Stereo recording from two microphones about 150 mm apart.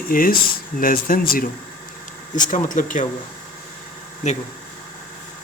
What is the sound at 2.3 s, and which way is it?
Speech, 60° left (ahead or behind).